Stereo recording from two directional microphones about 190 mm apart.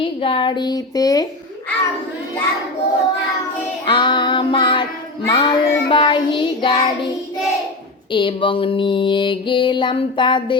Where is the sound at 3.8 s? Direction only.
25° left (ahead or behind).